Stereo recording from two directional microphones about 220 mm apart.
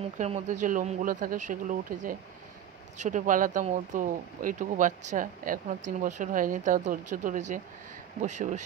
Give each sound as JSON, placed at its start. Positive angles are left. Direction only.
{"t": 0.2, "sound": "speech", "side_deg": -35}